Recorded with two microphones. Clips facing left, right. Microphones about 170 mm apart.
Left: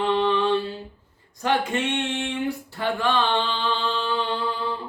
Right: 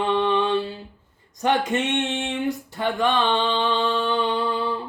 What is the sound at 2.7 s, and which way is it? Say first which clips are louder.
Mantra: right 1 dB; 20° right (ahead or behind).